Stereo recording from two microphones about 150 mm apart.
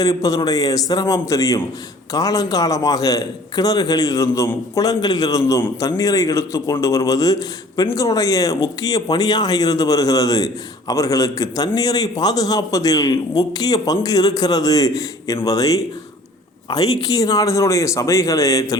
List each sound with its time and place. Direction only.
0.0 s speech: 25° left (ahead or behind)